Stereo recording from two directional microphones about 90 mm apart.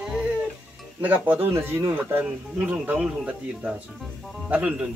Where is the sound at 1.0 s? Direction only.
20° right (ahead or behind).